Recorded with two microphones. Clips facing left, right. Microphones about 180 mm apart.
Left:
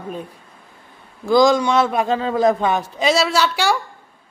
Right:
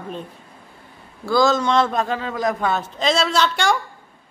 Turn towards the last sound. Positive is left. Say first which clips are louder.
# left 1 dB
turn(degrees=10)  # may be behind; listen again after turning